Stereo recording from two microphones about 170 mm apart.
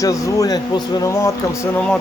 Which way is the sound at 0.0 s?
20° left (ahead or behind).